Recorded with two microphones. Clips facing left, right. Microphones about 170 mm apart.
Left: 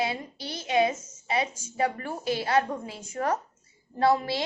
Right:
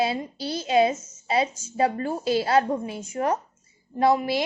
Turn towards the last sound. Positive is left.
turn(degrees=-15)  # may be behind; listen again after turning